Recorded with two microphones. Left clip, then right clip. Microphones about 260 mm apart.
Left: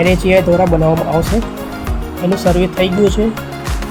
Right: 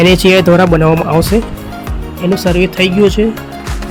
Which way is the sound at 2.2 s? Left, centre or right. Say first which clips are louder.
Right 2 dB; right.